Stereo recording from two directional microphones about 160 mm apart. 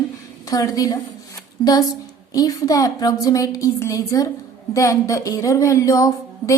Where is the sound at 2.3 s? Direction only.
20° left (ahead or behind).